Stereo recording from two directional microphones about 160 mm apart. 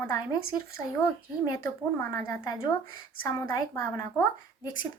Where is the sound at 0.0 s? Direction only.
20° left (ahead or behind).